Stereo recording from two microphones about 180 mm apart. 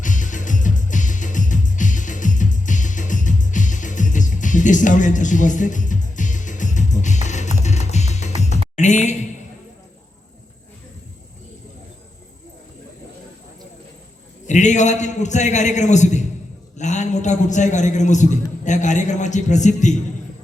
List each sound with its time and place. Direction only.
0.0 s music: 45° left (ahead or behind)
14.4 s a man's voice: 40° left (ahead or behind)